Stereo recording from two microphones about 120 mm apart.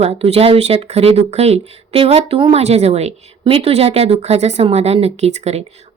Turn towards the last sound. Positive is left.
turn(degrees=-65)  # may be behind; listen again after turning